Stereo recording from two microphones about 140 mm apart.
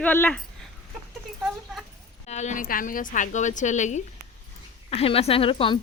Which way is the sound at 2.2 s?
55° left (ahead or behind).